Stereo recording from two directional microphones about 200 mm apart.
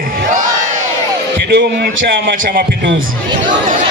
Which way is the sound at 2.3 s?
45° right (ahead or behind).